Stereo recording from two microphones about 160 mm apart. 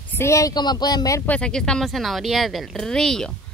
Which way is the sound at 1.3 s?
5° left (ahead or behind).